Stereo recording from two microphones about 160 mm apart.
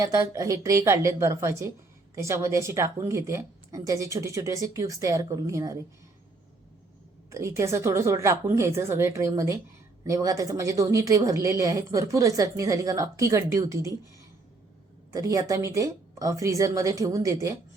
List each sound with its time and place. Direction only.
0.0 s speech: 20° right (ahead or behind)
7.3 s a woman's voice: 20° right (ahead or behind)
15.1 s speech: 20° right (ahead or behind)